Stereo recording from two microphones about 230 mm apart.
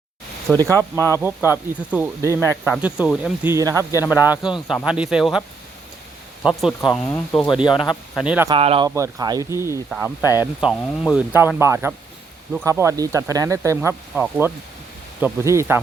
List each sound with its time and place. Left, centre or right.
0.5 s speech: centre
3.9 s speech: centre
4.2 s speech: centre
7.4 s speech: centre
8.1 s speech: centre
8.4 s speech: right
10.2 s speech: centre
10.4 s speech: centre